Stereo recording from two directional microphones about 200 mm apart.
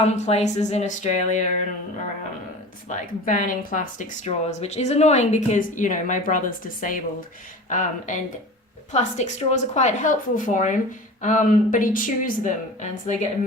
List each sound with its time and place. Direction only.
0.0 s speech: 30° left (ahead or behind)
2.9 s speech: 40° left (ahead or behind)